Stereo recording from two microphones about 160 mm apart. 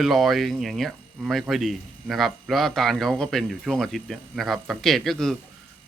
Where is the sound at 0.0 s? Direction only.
Centre (ahead or behind).